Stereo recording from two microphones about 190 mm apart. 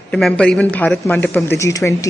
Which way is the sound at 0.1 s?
5° left (ahead or behind).